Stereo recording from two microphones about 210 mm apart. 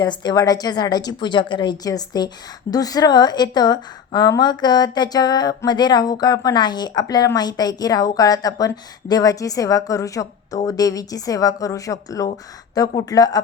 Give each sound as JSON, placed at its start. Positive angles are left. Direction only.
{"t": 0.0, "sound": "a woman's voice", "side_deg": 20}